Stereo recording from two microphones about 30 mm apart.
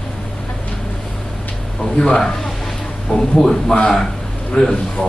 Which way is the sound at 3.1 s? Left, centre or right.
Left.